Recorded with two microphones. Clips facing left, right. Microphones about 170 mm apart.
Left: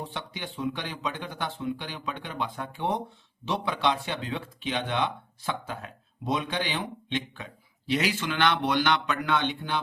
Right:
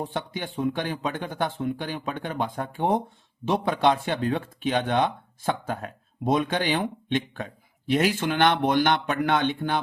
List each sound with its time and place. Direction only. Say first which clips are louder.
0.0 s speech: right 6 dB; 50° right (ahead or behind)